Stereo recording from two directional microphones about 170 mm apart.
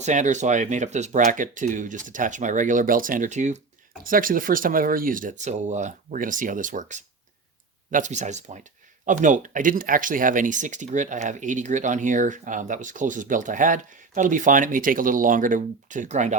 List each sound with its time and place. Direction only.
0.0 s speech: 45° right (ahead or behind)